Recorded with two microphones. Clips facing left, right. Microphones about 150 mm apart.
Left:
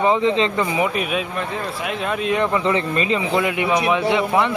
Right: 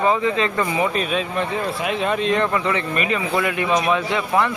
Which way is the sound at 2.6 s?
30° left (ahead or behind).